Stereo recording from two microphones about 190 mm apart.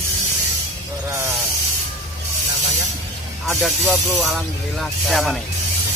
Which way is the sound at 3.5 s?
Centre (ahead or behind).